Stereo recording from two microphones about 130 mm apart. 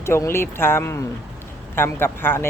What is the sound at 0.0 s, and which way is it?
Speech, 20° left (ahead or behind).